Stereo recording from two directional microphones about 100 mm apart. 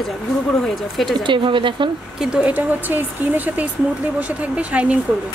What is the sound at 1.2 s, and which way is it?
Speech, 55° right (ahead or behind).